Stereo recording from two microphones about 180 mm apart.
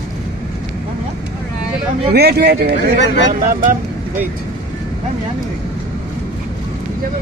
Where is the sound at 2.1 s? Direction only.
65° right (ahead or behind).